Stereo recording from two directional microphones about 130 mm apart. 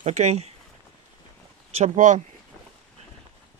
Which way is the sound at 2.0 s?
80° right.